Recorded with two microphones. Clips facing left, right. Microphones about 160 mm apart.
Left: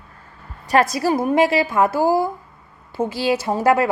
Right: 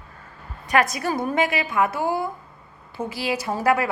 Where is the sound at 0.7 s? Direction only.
30° left (ahead or behind).